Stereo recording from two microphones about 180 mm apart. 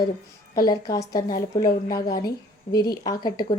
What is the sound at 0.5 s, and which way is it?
A woman's voice, 20° left (ahead or behind).